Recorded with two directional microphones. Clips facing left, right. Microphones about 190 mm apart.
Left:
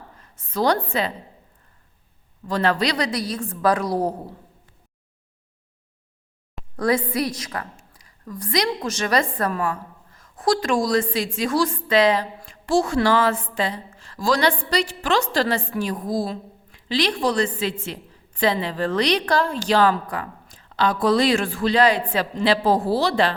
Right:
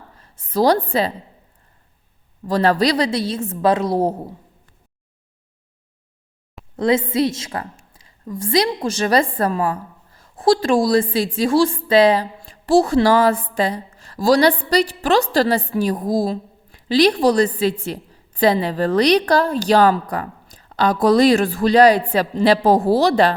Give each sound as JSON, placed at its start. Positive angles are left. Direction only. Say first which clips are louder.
{"t": 0.2, "sound": "a woman's voice", "louder": "right 5 dB", "side_deg": -30}
{"t": 2.5, "sound": "a woman's voice", "louder": "right 5 dB", "side_deg": -35}
{"t": 6.7, "sound": "a woman's voice", "louder": "right 4 dB", "side_deg": -25}